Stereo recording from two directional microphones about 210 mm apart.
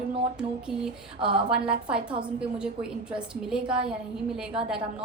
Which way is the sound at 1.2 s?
25° right (ahead or behind).